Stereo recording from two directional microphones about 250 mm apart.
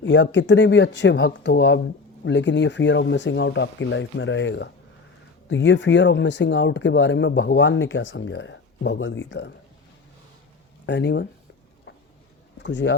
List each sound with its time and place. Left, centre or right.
0.0 s speech: left
10.8 s speech: left
11.9 s vehicle: left
12.5 s speech: left